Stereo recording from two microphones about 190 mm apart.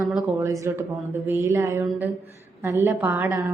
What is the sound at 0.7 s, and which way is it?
A woman's voice, 15° right (ahead or behind).